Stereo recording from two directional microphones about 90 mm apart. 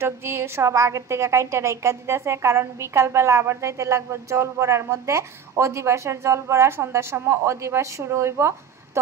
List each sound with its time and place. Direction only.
0.0 s a woman's voice: 30° right (ahead or behind)